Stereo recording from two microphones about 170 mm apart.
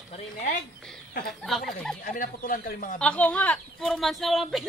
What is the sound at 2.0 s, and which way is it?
Speech, 55° left (ahead or behind).